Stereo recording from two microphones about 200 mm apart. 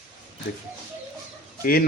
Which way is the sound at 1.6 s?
50° left (ahead or behind).